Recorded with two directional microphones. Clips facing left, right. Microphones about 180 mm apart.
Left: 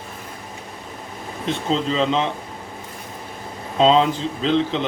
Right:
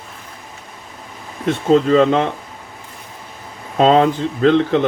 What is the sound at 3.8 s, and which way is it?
Speech, 55° right (ahead or behind).